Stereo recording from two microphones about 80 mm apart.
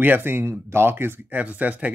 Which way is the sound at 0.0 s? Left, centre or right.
Right.